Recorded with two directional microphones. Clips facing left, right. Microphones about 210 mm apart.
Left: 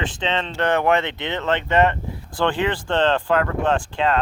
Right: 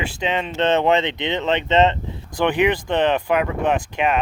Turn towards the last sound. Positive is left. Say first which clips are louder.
# even
turn(degrees=-20)  # may be behind; listen again after turning